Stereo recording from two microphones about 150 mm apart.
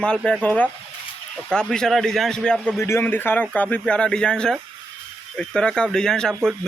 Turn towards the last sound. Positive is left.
turn(degrees=5)  # may be behind; listen again after turning